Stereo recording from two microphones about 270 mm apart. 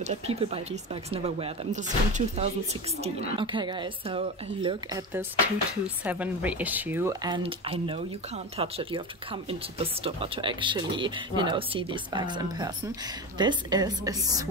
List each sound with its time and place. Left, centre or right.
0.0 s speech: right
5.7 s speech: centre